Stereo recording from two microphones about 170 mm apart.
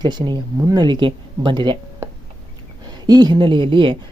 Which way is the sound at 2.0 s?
15° right (ahead or behind).